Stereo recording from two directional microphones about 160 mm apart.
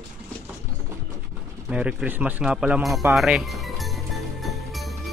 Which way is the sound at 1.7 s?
10° right (ahead or behind).